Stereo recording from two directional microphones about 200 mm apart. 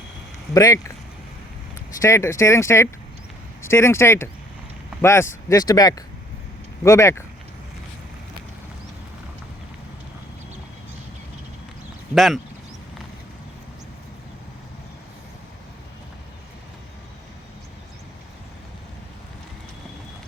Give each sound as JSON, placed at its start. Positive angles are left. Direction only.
{"t": 0.5, "sound": "speech", "side_deg": 15}
{"t": 2.0, "sound": "speech", "side_deg": 15}
{"t": 12.1, "sound": "speech", "side_deg": 0}